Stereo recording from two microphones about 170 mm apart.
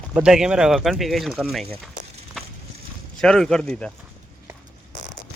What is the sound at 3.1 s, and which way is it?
Speech, 5° left (ahead or behind).